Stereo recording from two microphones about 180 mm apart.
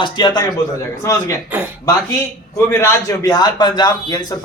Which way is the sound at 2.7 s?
15° left (ahead or behind).